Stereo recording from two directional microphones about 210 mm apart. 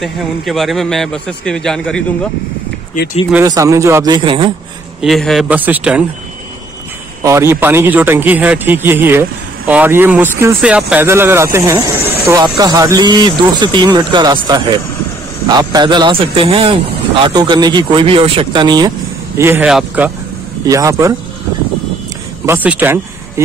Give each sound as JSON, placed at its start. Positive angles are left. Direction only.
{"t": 0.0, "sound": "a man's voice", "side_deg": 0}
{"t": 3.4, "sound": "speech", "side_deg": -15}
{"t": 5.0, "sound": "a man's voice", "side_deg": 0}
{"t": 7.2, "sound": "speech", "side_deg": -15}
{"t": 19.3, "sound": "speech", "side_deg": -10}
{"t": 22.5, "sound": "speech", "side_deg": -10}